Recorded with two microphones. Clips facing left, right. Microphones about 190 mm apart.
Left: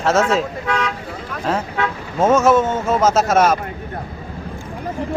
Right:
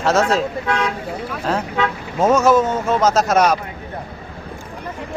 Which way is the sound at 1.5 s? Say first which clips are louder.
Even; centre (ahead or behind).